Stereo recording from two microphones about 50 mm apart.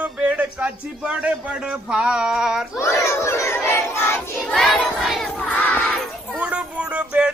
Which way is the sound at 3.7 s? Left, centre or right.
Left.